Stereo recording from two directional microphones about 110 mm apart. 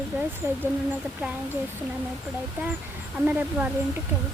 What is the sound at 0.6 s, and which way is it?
Speech, 15° right (ahead or behind).